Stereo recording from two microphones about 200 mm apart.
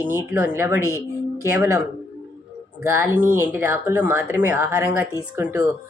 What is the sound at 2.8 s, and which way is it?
Speech, 10° right (ahead or behind).